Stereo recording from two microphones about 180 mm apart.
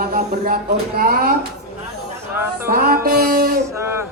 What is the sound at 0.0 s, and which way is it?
Speech, 55° right (ahead or behind).